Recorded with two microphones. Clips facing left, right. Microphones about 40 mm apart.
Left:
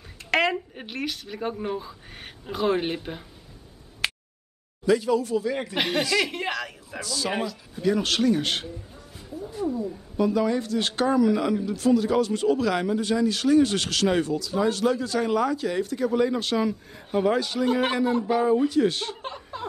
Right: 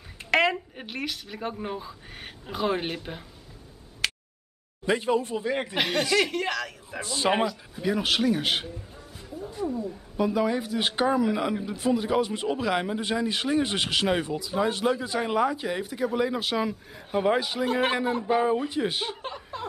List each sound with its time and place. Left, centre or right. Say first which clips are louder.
0.3 s speech: even; centre
4.0 s a sound: left 1 dB; centre
4.8 s speech: left 3 dB; right
5.8 s a man's voice: even; centre
6.3 s speech: right 1 dB; centre
7.0 s speech: right 3 dB; right
7.7 s speech: left 5 dB; centre
10.1 s speech: left 2 dB; centre
17.6 s a man's voice: left 2 dB; centre
19.2 s laughter: even; centre